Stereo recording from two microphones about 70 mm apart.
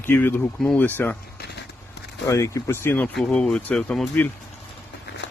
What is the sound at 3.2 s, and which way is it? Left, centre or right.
Speech, centre.